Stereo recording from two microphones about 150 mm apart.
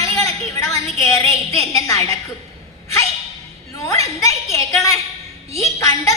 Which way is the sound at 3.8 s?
20° left (ahead or behind).